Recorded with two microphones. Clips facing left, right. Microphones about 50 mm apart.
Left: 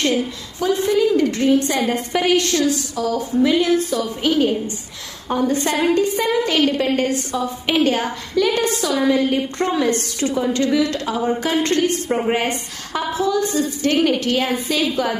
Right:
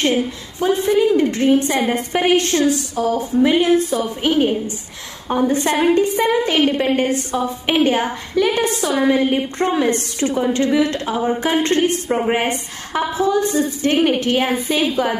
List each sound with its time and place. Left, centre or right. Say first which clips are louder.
0.8 s a woman's voice: right 1 dB; right
12.1 s a woman's voice: right 1 dB; centre
12.4 s a woman's voice: right 1 dB; right